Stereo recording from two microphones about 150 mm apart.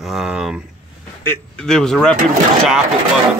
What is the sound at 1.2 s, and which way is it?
Speech, 15° left (ahead or behind).